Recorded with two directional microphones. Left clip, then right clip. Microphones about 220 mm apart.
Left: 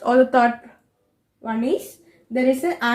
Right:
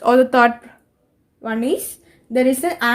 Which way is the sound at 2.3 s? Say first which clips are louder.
Right 3 dB; 45° right (ahead or behind).